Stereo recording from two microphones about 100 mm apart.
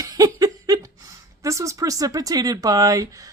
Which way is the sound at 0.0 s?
35° right (ahead or behind).